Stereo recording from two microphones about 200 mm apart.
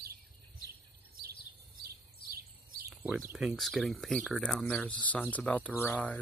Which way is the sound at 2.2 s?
45° right (ahead or behind).